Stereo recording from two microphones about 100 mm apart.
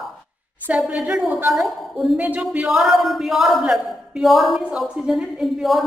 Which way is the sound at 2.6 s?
Centre (ahead or behind).